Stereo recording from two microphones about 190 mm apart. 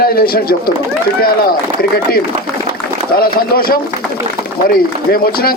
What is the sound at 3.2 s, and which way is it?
A man's voice, 50° left (ahead or behind).